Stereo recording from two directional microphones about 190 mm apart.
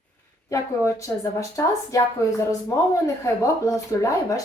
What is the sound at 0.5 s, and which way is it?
A woman's voice, 15° left (ahead or behind).